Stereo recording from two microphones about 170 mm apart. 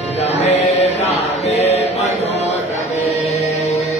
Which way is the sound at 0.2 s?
40° left (ahead or behind).